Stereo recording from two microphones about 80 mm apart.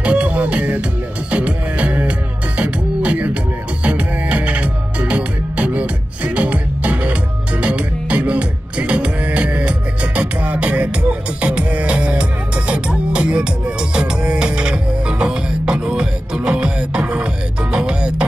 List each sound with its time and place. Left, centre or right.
0.0 s music: centre